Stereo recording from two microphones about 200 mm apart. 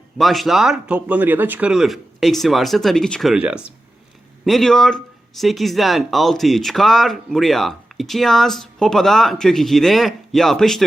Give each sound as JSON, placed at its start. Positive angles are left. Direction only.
{"t": 0.2, "sound": "speech", "side_deg": 0}